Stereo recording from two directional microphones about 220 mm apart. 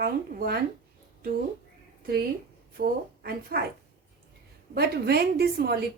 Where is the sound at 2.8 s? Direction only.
40° right (ahead or behind).